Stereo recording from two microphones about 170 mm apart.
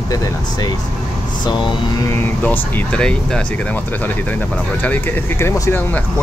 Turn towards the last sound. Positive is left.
turn(degrees=15)  # may be behind; listen again after turning